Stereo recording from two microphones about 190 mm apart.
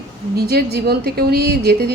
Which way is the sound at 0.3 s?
55° right (ahead or behind).